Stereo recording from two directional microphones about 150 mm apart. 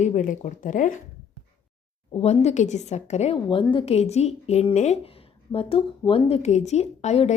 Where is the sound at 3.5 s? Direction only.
35° left (ahead or behind).